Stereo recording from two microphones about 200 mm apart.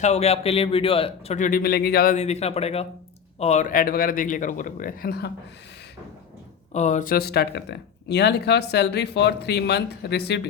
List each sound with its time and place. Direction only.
0.0 s speech: 35° left (ahead or behind); by 2.1 s 50° left (ahead or behind)
2.1 s speech: 35° left (ahead or behind); by 5.3 s 50° left (ahead or behind)
6.7 s speech: 35° left (ahead or behind); by 10.4 s 55° left (ahead or behind)